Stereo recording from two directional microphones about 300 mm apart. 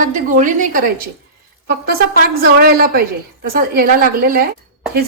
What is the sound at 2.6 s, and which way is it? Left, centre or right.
A woman's voice, right.